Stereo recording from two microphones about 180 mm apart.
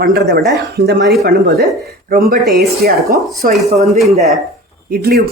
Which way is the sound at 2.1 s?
55° right (ahead or behind).